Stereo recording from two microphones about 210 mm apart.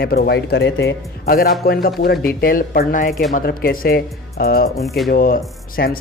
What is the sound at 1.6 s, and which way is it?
Speech, 45° left (ahead or behind).